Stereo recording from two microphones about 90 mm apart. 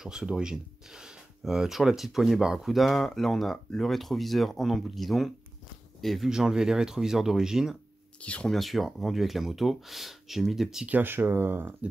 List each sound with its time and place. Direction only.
0.0 s speech: 5° right (ahead or behind)
8.2 s speech: 15° left (ahead or behind)
8.5 s speech: centre (ahead or behind)
10.9 s speech: 20° right (ahead or behind)